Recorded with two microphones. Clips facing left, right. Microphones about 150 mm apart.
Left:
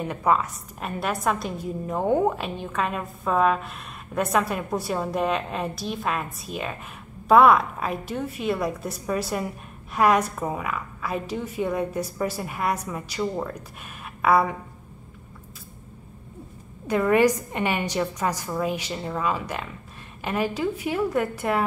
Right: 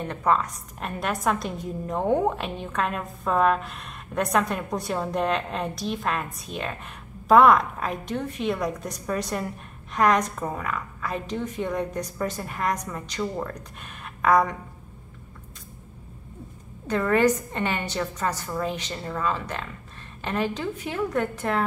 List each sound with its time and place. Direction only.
0.0 s a woman's voice: 10° left (ahead or behind)
16.8 s a woman's voice: 10° left (ahead or behind)